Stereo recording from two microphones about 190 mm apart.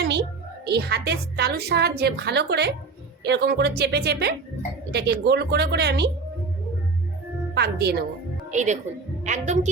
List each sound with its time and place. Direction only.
0.0 s a woman's voice: 60° right (ahead or behind)
7.5 s a woman's voice: 60° right (ahead or behind)
8.4 s a woman's voice: 40° right (ahead or behind)